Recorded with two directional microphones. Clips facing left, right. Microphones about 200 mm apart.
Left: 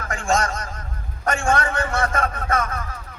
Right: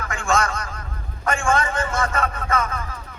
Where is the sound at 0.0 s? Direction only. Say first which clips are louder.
Even; 45° left (ahead or behind).